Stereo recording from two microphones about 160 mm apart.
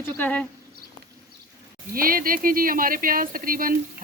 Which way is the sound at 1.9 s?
65° right (ahead or behind).